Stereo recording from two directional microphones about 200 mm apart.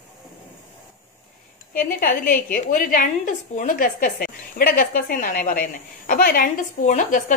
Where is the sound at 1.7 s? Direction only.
45° left (ahead or behind).